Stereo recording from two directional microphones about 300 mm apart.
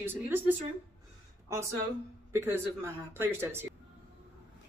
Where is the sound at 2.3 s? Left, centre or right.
Centre.